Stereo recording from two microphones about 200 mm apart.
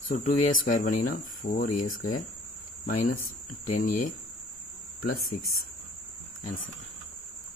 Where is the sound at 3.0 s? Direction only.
45° left (ahead or behind).